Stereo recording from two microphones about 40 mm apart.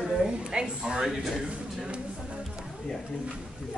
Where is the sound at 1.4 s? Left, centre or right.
Right.